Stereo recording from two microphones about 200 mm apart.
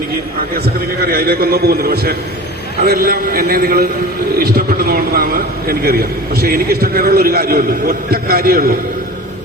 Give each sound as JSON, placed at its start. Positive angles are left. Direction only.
{"t": 1.0, "sound": "a man's voice", "side_deg": -50}